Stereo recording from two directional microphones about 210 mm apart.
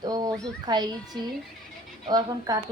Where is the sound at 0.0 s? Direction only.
20° right (ahead or behind).